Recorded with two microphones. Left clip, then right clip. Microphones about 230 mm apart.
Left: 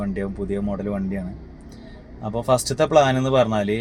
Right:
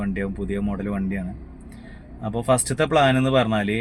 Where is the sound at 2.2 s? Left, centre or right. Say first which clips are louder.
Left 1 dB; left.